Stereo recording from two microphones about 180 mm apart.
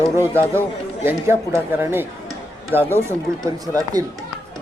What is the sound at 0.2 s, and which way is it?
Speech, 15° right (ahead or behind).